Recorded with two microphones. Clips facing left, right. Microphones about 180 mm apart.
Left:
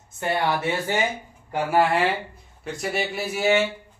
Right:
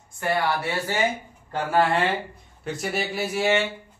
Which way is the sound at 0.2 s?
20° left (ahead or behind).